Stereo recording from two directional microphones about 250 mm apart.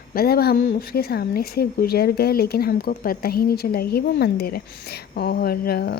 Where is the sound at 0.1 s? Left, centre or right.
Left.